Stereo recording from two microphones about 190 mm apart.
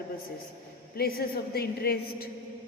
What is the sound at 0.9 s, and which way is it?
Mantra, 55° left (ahead or behind).